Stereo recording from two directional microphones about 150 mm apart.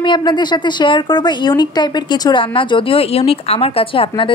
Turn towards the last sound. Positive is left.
turn(degrees=35)  # may be behind; listen again after turning